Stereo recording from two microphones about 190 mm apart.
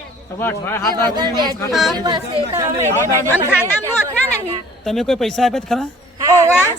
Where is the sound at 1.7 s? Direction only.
Centre (ahead or behind).